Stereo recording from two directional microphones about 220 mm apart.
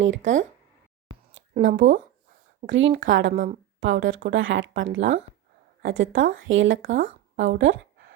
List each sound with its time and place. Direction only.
0.2 s a woman's voice: 35° right (ahead or behind)
1.6 s speech: 60° right (ahead or behind)
3.3 s a woman's voice: 35° right (ahead or behind)
3.8 s speech: 60° right (ahead or behind)